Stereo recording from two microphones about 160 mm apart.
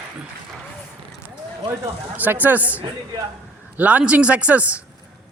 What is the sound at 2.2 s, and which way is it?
Speech, 10° right (ahead or behind).